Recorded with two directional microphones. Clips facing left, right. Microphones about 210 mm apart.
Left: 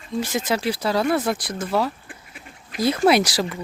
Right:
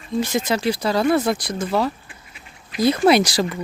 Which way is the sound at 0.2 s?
5° left (ahead or behind).